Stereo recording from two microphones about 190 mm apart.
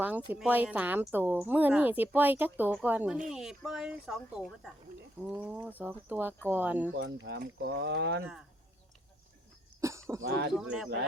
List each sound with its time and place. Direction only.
0.3 s a woman's voice: 10° right (ahead or behind)
6.9 s speech: 60° right (ahead or behind)
8.2 s speech: 5° right (ahead or behind)
9.8 s a sound: 15° right (ahead or behind)
10.2 s speech: 75° right (ahead or behind)
10.5 s speech: 5° right (ahead or behind)